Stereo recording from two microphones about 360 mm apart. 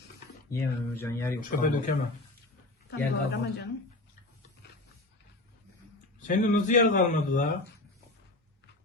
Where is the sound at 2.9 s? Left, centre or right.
Left.